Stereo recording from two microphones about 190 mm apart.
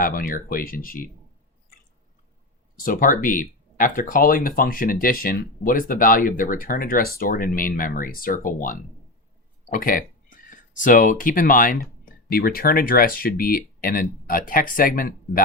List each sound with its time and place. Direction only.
0.0 s speech: 50° left (ahead or behind)
2.7 s speech: 45° left (ahead or behind)